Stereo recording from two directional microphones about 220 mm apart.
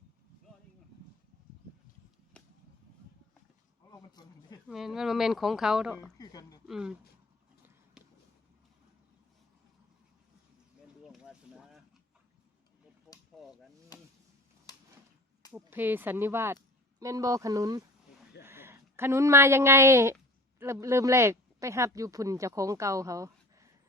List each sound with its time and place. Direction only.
2.3 s chop: 5° left (ahead or behind)
3.9 s speech: 20° left (ahead or behind)
4.7 s speech: centre (ahead or behind)
6.0 s a woman's voice: 15° left (ahead or behind)
6.7 s speech: 5° right (ahead or behind)
8.0 s a sound: centre (ahead or behind)
11.0 s boat: centre (ahead or behind)
13.3 s a sound: centre (ahead or behind)
14.7 s a sound: 15° left (ahead or behind)
15.5 s speech: 10° right (ahead or behind)